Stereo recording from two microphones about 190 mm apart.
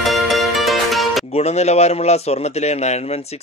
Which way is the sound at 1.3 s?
35° left (ahead or behind).